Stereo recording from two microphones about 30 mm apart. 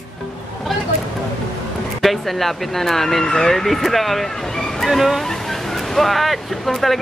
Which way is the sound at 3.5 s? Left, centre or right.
Centre.